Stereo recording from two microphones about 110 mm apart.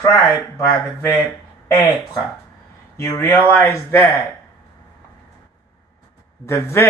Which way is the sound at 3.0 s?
25° left (ahead or behind).